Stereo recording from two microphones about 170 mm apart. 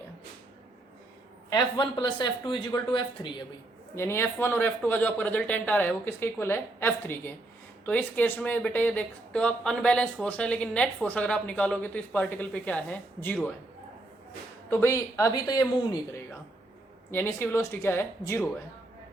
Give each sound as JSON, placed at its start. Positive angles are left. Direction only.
{"t": 1.5, "sound": "speech", "side_deg": 25}
{"t": 3.9, "sound": "speech", "side_deg": 15}
{"t": 14.7, "sound": "speech", "side_deg": 15}
{"t": 17.1, "sound": "speech", "side_deg": 15}